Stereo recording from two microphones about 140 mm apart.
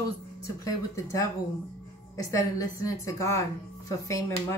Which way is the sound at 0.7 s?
25° left (ahead or behind).